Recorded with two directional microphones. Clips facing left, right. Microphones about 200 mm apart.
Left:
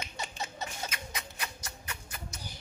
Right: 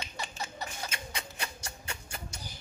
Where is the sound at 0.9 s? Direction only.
30° right (ahead or behind).